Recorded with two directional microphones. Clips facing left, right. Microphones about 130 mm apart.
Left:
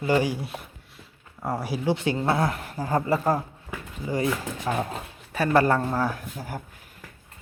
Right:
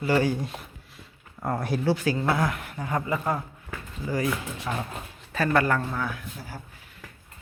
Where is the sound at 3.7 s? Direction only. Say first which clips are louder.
Left 1 dB; 30° left (ahead or behind).